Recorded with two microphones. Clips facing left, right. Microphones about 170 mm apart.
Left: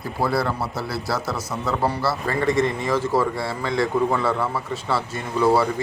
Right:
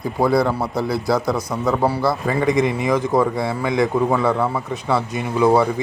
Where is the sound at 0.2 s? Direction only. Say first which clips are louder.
Right 5 dB; 20° right (ahead or behind).